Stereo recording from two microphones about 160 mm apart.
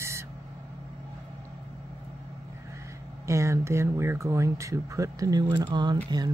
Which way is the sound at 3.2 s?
20° right (ahead or behind).